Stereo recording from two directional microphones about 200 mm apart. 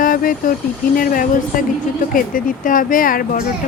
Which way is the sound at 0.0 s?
45° left (ahead or behind).